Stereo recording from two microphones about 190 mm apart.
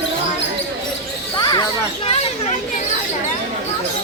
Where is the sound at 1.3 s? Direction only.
20° left (ahead or behind).